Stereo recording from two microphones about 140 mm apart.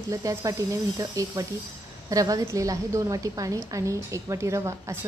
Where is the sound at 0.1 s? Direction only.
25° right (ahead or behind).